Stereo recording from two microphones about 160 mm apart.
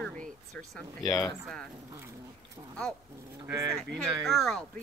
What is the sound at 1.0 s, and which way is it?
Speech, 20° left (ahead or behind).